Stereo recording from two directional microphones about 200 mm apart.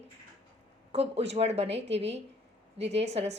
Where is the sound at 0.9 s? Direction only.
30° right (ahead or behind).